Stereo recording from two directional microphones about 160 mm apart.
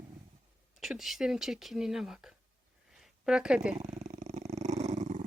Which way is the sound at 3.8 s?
40° right (ahead or behind).